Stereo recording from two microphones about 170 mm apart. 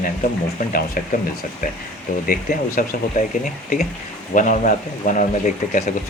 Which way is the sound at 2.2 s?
55° left (ahead or behind).